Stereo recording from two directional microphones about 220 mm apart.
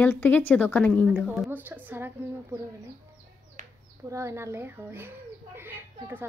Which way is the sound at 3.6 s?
35° right (ahead or behind).